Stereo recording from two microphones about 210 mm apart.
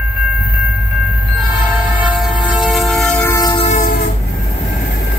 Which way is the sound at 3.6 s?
35° left (ahead or behind).